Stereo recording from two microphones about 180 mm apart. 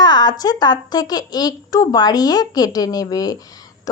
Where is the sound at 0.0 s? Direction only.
20° left (ahead or behind).